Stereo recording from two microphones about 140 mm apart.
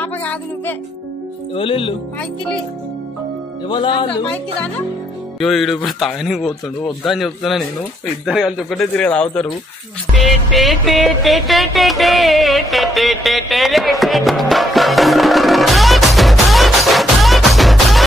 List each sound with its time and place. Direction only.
0.0 s music: 10° left (ahead or behind)
1.5 s speech: 40° left (ahead or behind)
3.6 s speech: 35° left (ahead or behind)
4.3 s speech: 10° left (ahead or behind)
10.1 s music: centre (ahead or behind)